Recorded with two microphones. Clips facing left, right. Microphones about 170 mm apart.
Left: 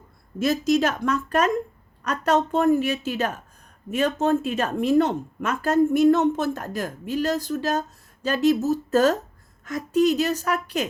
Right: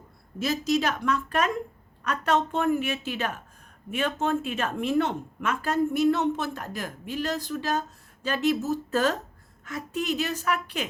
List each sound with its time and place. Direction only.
0.3 s a woman's voice: 50° left (ahead or behind)